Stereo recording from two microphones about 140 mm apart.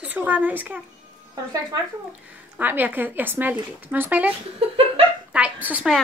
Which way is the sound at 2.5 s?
10° right (ahead or behind).